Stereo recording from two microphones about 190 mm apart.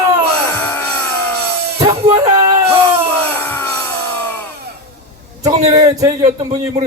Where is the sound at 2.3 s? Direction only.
20° right (ahead or behind).